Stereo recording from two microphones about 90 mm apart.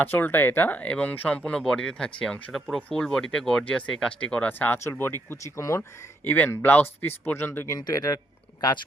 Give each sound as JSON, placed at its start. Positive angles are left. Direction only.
{"t": 0.0, "sound": "speech", "side_deg": 20}
{"t": 1.5, "sound": "speech", "side_deg": 10}
{"t": 4.5, "sound": "speech", "side_deg": 20}
{"t": 5.5, "sound": "speech", "side_deg": 35}
{"t": 6.2, "sound": "speech", "side_deg": 20}
{"t": 7.9, "sound": "speech", "side_deg": 40}